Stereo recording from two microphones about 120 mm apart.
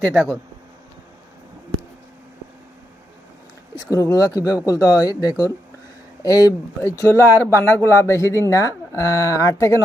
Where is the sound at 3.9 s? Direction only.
30° left (ahead or behind).